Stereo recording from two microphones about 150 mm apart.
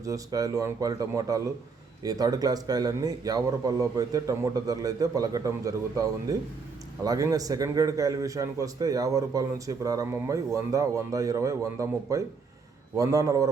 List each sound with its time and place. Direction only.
0.0 s a man's voice: 25° right (ahead or behind)